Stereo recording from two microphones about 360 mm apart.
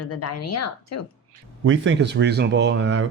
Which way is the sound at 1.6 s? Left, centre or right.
Right.